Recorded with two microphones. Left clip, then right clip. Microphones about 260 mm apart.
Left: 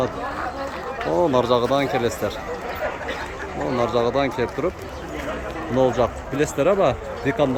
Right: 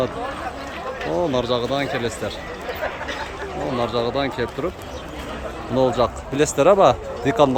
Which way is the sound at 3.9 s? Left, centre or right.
Centre.